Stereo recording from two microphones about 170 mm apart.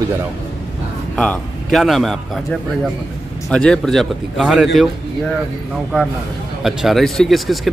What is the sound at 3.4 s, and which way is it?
A man's voice, 5° left (ahead or behind).